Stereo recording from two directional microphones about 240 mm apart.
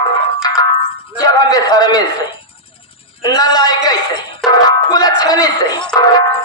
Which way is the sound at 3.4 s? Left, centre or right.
Centre.